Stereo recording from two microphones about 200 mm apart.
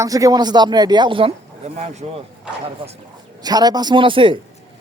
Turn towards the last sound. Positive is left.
turn(degrees=-25)  # may be behind; listen again after turning